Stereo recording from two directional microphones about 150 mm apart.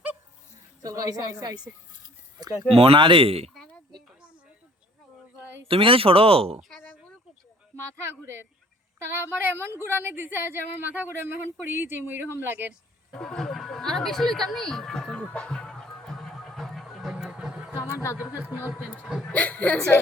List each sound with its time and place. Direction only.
0.8 s a woman's voice: 25° right (ahead or behind)
2.6 s speech: 40° right (ahead or behind)
3.5 s a sound: 5° left (ahead or behind)
5.6 s speech: 35° right (ahead or behind)
6.6 s a sound: 5° left (ahead or behind)
9.1 s a woman's voice: 15° right (ahead or behind)
13.1 s music: 5° left (ahead or behind)
17.7 s a sound: 20° left (ahead or behind)
18.2 s a woman's voice: 10° right (ahead or behind)
19.2 s speech: 10° left (ahead or behind)